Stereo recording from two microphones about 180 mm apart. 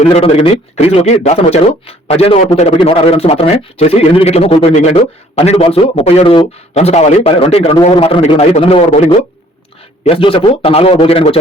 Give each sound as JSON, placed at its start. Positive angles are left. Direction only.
{"t": 0.0, "sound": "a man's voice", "side_deg": 35}